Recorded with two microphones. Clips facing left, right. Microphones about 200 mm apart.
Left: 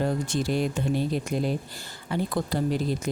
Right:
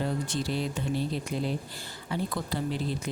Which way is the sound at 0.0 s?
50° left (ahead or behind).